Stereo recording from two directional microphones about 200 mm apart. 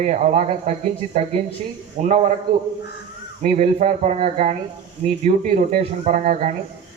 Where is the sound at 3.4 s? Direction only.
35° right (ahead or behind).